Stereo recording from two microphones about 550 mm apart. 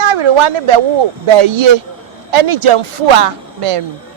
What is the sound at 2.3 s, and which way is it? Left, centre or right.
Speech, right.